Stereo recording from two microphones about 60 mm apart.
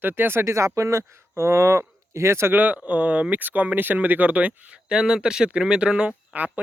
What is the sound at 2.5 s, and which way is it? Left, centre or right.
Speech, right.